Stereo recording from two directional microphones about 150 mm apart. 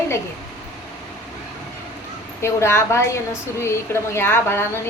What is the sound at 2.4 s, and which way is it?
A woman's voice, 15° left (ahead or behind).